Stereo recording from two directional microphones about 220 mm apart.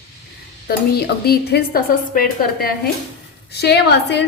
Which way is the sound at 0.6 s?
45° left (ahead or behind).